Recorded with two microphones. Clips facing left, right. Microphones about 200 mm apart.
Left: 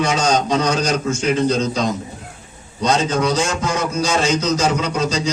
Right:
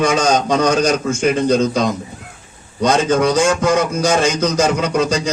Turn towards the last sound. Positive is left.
turn(degrees=-50)  # may be behind; listen again after turning